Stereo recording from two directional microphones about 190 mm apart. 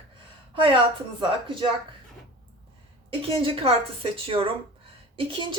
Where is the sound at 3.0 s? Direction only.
30° right (ahead or behind).